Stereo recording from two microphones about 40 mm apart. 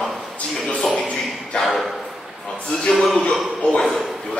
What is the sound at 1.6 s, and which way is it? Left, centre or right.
Speech, centre.